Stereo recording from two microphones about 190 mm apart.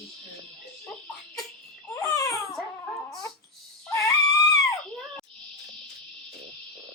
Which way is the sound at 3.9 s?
15° left (ahead or behind).